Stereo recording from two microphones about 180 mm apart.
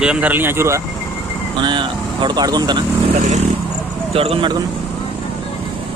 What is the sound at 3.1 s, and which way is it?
Speech, 40° right (ahead or behind).